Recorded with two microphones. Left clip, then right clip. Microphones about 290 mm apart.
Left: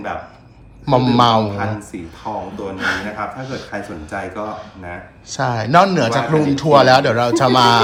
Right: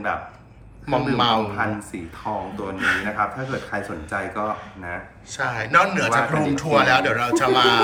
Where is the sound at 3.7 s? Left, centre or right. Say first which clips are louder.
Left 1 dB; centre.